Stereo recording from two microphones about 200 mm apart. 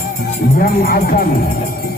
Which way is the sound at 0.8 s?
45° left (ahead or behind).